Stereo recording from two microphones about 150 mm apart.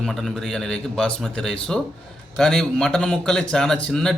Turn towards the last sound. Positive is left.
turn(degrees=5)  # may be behind; listen again after turning